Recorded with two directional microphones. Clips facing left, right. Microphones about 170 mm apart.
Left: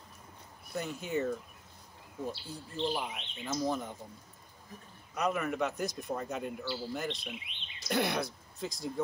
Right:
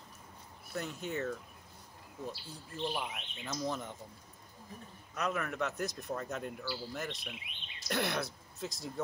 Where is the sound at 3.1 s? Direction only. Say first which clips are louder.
Left 4 dB; centre (ahead or behind).